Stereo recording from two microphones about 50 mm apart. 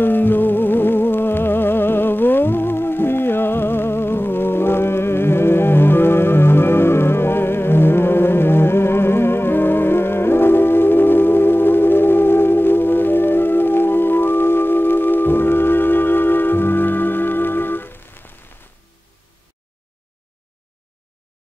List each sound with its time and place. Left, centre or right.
0.0 s music: left